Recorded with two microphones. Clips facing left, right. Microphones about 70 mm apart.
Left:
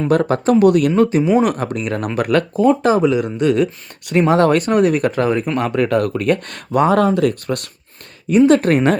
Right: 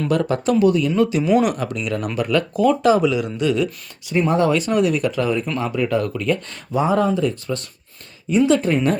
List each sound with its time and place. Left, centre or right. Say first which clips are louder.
0.1 s speech: left 5 dB; left
0.6 s speech: left 4 dB; left
1.2 s speech: left 2 dB; left
1.5 s speech: left 3 dB; left
2.5 s speech: even; left
5.5 s speech: left 4 dB; left
8.3 s speech: left 5 dB; left